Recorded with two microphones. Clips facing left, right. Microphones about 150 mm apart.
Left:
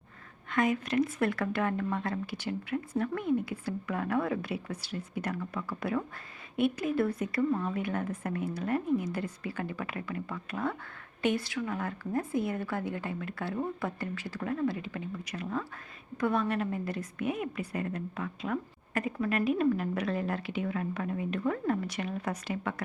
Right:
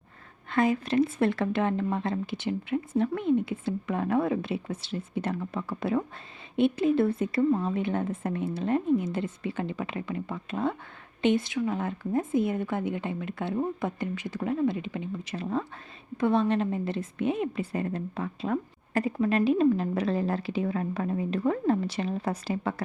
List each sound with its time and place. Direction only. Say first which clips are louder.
0.5 s a woman's voice: right 4 dB; 30° right (ahead or behind)